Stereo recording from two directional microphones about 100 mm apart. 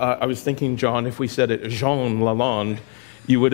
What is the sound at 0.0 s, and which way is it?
Speech, 15° left (ahead or behind).